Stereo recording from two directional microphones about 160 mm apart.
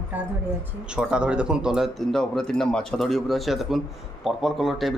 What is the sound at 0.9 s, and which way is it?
Speech, 5° right (ahead or behind).